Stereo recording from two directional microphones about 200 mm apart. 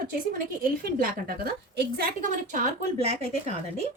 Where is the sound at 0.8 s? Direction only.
50° right (ahead or behind).